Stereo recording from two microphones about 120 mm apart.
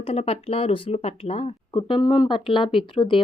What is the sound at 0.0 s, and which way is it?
A woman's voice, 55° left (ahead or behind).